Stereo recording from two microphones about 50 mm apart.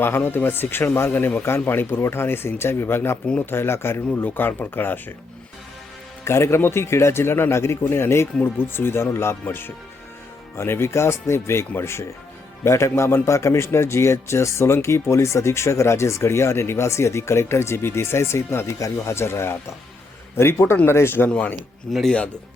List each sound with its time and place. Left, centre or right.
0.3 s speech: left
4.2 s speech: left
6.2 s speech: left
8.4 s speech: left
10.6 s a man's voice: left
21.2 s speech: left
21.9 s speech: centre